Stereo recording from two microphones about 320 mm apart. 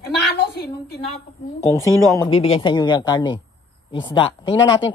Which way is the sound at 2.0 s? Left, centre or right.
Centre.